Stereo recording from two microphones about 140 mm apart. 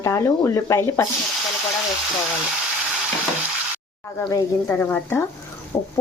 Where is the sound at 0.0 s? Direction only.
20° left (ahead or behind).